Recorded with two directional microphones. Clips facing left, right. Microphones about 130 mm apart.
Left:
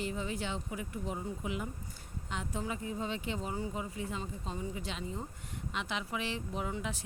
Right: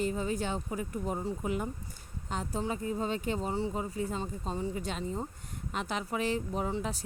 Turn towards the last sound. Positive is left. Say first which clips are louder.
# right 6 dB
turn(degrees=-40)  # may be behind; listen again after turning